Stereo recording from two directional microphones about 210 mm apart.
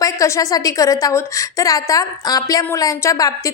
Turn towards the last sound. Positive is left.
turn(degrees=15)  # may be behind; listen again after turning